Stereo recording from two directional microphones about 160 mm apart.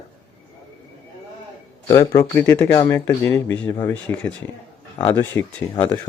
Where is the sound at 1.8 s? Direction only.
20° left (ahead or behind).